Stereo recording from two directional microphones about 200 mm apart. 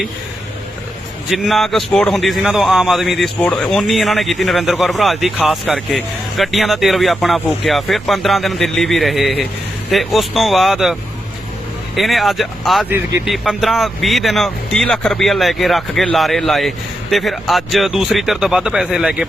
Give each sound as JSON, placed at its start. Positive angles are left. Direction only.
{"t": 1.3, "sound": "speech", "side_deg": 0}
{"t": 11.9, "sound": "speech", "side_deg": 0}